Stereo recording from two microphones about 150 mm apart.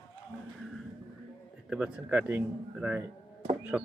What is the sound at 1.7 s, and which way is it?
Speech, 5° right (ahead or behind).